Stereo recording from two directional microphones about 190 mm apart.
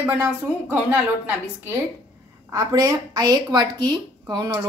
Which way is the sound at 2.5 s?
20° right (ahead or behind).